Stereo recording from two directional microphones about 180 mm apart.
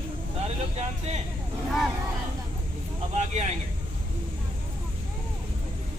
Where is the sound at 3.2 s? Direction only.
40° right (ahead or behind).